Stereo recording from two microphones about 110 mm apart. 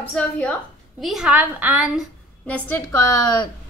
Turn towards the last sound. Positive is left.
turn(degrees=30)  # may be behind; listen again after turning